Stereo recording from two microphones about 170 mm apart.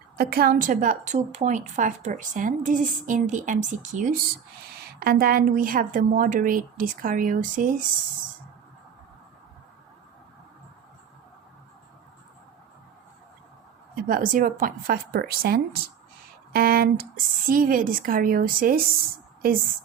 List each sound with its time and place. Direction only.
0.2 s a woman's voice: 60° right (ahead or behind)
4.9 s a woman's voice: 65° right (ahead or behind)
13.9 s speech: 55° right (ahead or behind)